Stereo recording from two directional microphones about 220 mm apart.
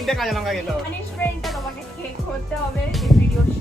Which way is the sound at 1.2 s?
Centre (ahead or behind).